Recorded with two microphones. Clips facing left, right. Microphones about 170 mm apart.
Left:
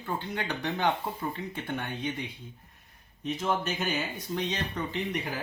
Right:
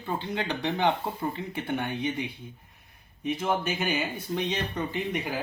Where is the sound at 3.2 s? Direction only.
10° right (ahead or behind).